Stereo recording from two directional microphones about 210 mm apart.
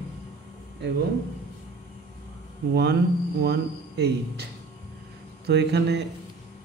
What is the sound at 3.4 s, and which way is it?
Speech, 50° right (ahead or behind).